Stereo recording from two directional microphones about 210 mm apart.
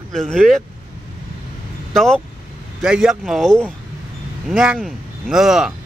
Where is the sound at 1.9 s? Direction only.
Centre (ahead or behind).